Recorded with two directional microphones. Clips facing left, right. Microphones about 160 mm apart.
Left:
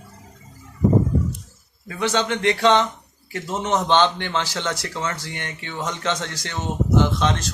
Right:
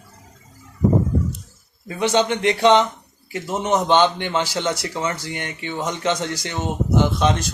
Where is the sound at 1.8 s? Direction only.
20° right (ahead or behind).